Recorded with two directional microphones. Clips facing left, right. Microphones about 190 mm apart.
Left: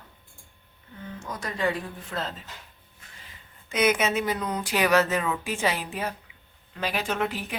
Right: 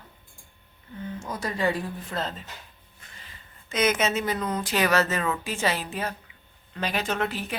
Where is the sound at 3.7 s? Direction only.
10° left (ahead or behind).